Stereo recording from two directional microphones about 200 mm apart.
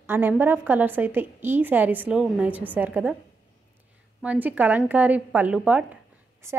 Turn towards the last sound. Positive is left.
turn(degrees=-15)  # may be behind; listen again after turning